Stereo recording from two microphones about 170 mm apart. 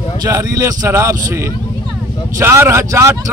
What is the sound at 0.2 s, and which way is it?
A man's voice, 20° right (ahead or behind).